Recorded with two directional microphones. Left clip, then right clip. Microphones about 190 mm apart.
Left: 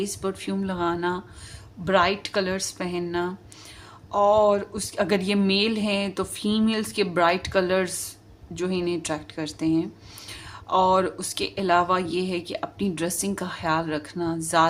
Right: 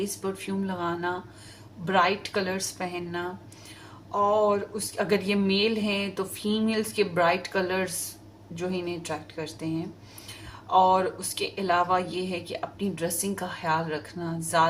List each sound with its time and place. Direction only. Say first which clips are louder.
0.0 s speech: left 3 dB; 50° left (ahead or behind)